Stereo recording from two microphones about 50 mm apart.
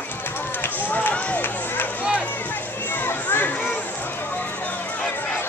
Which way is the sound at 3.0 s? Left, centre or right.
Left.